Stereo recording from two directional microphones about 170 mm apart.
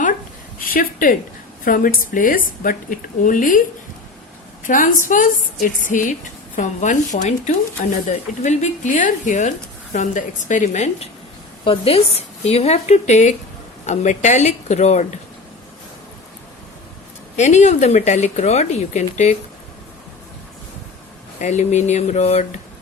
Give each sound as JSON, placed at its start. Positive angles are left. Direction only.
{"t": 0.6, "sound": "speech", "side_deg": 55}
{"t": 4.6, "sound": "a woman's voice", "side_deg": 50}
{"t": 11.6, "sound": "a woman's voice", "side_deg": 35}
{"t": 17.3, "sound": "speech", "side_deg": 45}
{"t": 21.3, "sound": "a woman's voice", "side_deg": 40}